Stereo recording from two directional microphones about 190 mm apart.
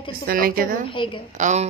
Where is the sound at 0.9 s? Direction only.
25° left (ahead or behind).